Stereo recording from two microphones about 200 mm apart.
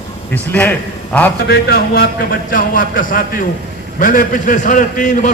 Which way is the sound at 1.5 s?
50° left (ahead or behind).